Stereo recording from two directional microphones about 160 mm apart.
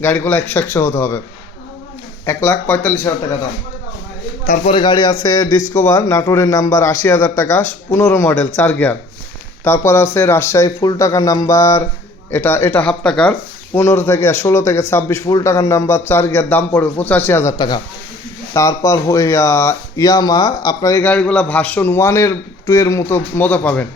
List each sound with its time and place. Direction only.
0.0 s speech: 10° left (ahead or behind)
2.2 s speech: 15° left (ahead or behind)
4.4 s a man's voice: 60° left (ahead or behind)
4.7 s a man's voice: 30° left (ahead or behind); by 17.5 s 15° left (ahead or behind)
18.5 s speech: 20° left (ahead or behind)